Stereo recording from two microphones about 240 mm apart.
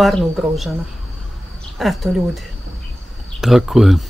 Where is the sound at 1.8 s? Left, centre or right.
Centre.